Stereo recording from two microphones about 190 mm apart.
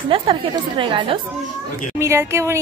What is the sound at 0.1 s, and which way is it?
A woman's voice, 30° right (ahead or behind).